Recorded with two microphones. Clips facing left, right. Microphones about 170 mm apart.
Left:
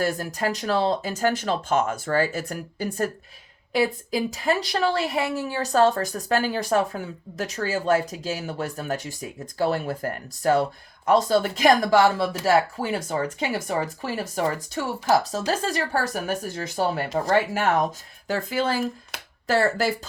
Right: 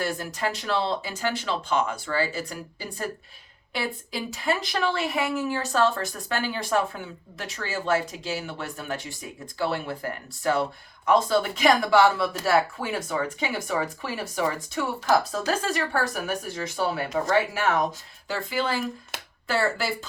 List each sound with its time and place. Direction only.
0.0 s a woman's voice: 45° left (ahead or behind)